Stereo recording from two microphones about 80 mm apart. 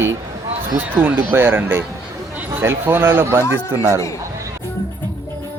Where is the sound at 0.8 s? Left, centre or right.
Right.